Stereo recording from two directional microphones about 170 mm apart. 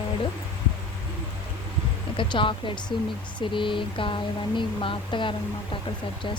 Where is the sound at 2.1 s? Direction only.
30° left (ahead or behind).